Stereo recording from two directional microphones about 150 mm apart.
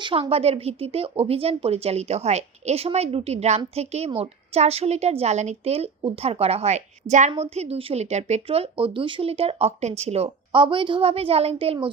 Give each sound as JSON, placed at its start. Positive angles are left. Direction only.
{"t": 0.0, "sound": "a woman's voice", "side_deg": -40}